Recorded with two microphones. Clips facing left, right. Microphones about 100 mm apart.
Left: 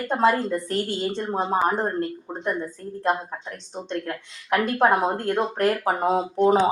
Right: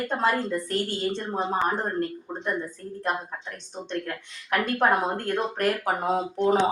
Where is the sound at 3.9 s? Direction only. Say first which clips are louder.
Left 2 dB; 25° left (ahead or behind).